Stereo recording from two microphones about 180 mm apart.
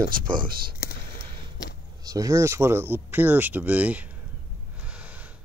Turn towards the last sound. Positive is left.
turn(degrees=-10)  # may be behind; listen again after turning